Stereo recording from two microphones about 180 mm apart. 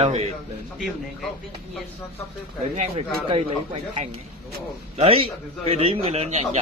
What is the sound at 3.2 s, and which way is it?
A man's voice, 40° right (ahead or behind).